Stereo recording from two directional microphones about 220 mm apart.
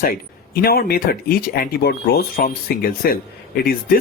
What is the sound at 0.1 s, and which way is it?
Speech, 40° left (ahead or behind).